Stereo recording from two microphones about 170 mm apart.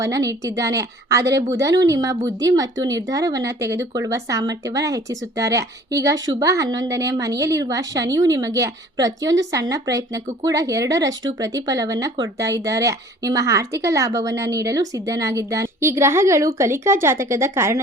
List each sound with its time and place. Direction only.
0.0 s a woman's voice: 20° right (ahead or behind)